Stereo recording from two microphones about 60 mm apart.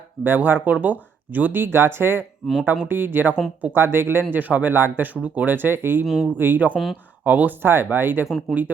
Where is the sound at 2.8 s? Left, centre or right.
Right.